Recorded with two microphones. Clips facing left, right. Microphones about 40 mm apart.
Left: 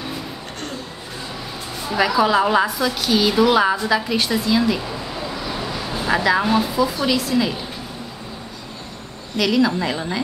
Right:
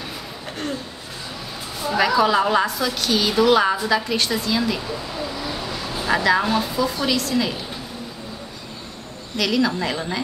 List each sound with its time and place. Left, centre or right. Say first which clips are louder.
1.8 s a woman's voice: even; centre
9.4 s a woman's voice: left 3 dB; centre